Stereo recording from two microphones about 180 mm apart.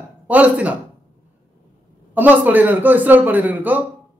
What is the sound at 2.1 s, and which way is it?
A woman's voice, 10° right (ahead or behind).